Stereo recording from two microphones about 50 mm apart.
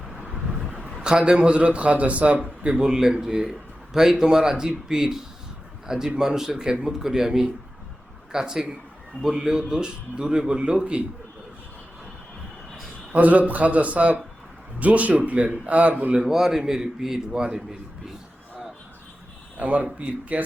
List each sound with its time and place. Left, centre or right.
0.0 s vehicle: centre
1.0 s a man's voice: centre
13.1 s a man's voice: right
16.2 s a man's voice: centre
19.5 s a man's voice: right